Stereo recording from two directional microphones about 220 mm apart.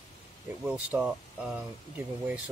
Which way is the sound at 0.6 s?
5° right (ahead or behind).